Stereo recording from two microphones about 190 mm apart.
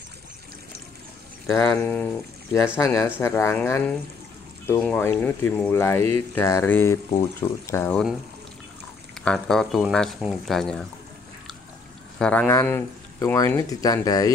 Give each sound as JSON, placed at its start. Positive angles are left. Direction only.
{"t": 1.6, "sound": "speech", "side_deg": 10}
{"t": 7.9, "sound": "speech", "side_deg": 0}
{"t": 9.2, "sound": "speech", "side_deg": 5}
{"t": 12.2, "sound": "speech", "side_deg": 5}